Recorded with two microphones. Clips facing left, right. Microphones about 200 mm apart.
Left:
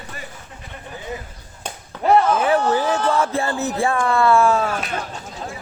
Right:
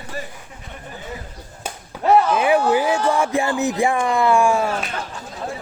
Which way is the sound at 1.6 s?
5° right (ahead or behind).